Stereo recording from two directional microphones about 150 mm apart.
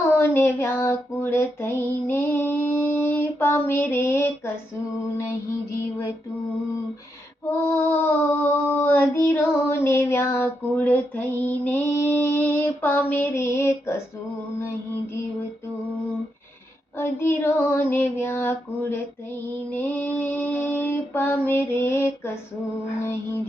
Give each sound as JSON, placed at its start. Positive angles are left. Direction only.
{"t": 0.2, "sound": "music", "side_deg": 15}
{"t": 7.5, "sound": "female singing", "side_deg": 15}
{"t": 17.0, "sound": "female singing", "side_deg": 15}